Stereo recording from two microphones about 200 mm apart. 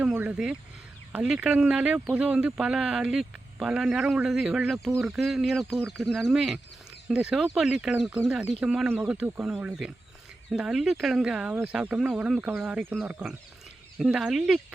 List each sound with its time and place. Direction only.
0.0 s speech: 10° right (ahead or behind)